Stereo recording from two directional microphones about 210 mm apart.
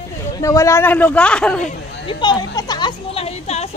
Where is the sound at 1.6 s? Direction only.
25° left (ahead or behind).